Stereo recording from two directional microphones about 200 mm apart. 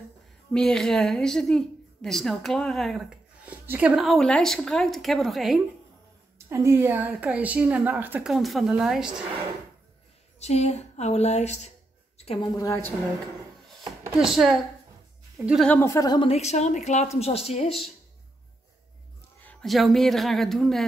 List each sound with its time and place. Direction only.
0.5 s a woman's voice: 5° left (ahead or behind)
6.3 s a woman's voice: 15° right (ahead or behind)
10.4 s a woman's voice: 35° left (ahead or behind)
12.5 s a woman's voice: 15° left (ahead or behind)
14.2 s a woman's voice: centre (ahead or behind)
15.8 s a woman's voice: 15° left (ahead or behind); by 17.7 s 30° left (ahead or behind)
19.4 s a woman's voice: centre (ahead or behind)